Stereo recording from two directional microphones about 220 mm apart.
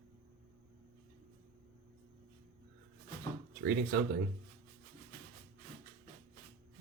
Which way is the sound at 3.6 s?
50° right (ahead or behind).